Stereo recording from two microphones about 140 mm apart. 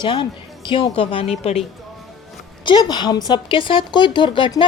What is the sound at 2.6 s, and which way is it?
Speech, 30° left (ahead or behind).